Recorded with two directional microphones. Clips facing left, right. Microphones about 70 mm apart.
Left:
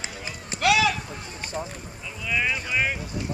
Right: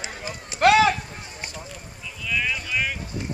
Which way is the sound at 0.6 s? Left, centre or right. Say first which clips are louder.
Right 5 dB; right.